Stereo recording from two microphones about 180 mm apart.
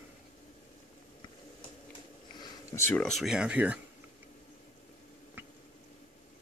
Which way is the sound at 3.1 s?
Centre (ahead or behind).